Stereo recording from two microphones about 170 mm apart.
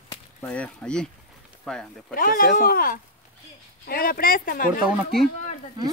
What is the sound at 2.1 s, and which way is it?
Speech, 55° left (ahead or behind).